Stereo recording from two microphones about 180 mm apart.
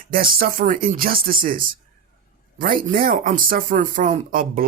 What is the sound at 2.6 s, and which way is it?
Speech, 50° right (ahead or behind).